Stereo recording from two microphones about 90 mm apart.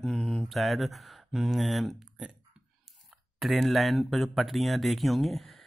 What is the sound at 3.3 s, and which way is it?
Speech, centre (ahead or behind).